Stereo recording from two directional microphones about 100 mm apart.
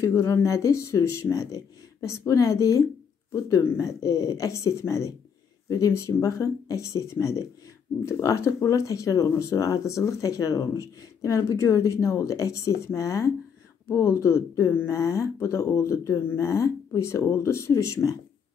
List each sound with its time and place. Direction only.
0.0 s speech: 30° left (ahead or behind)